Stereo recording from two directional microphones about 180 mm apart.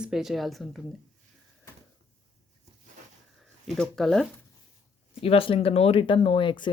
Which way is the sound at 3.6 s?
Centre (ahead or behind).